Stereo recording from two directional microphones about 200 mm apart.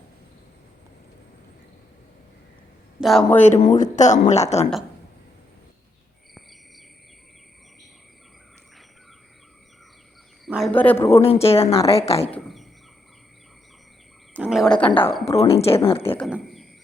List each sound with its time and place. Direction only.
3.0 s speech: centre (ahead or behind)
3.6 s a woman's voice: 35° left (ahead or behind)
10.4 s speech: centre (ahead or behind)
11.1 s speech: 30° left (ahead or behind)
12.3 s speech: centre (ahead or behind)
14.3 s speech: 5° right (ahead or behind)
15.2 s speech: 30° left (ahead or behind)
16.1 s speech: centre (ahead or behind)